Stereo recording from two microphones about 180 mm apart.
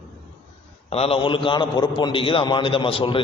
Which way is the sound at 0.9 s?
35° left (ahead or behind).